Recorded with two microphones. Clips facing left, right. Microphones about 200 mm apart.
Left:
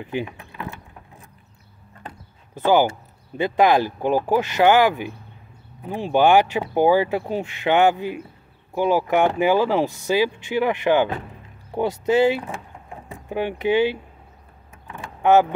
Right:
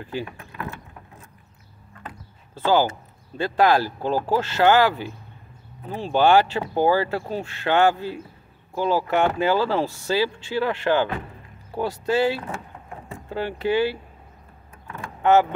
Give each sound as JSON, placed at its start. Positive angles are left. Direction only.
{"t": 0.0, "sound": "speech", "side_deg": 20}
{"t": 2.5, "sound": "speech", "side_deg": 15}
{"t": 15.2, "sound": "speech", "side_deg": 15}